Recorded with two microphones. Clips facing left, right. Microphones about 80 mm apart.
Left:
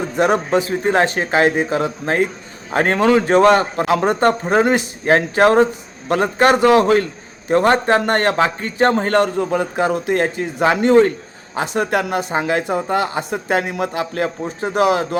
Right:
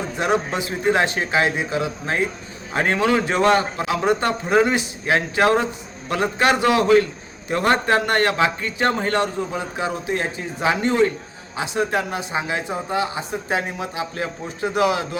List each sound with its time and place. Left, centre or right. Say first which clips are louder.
0.2 s a man's voice: left 6 dB; left
9.2 s a man's voice: left 6 dB; left